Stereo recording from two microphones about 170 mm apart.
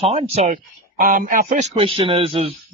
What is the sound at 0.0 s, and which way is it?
Speech, 35° right (ahead or behind).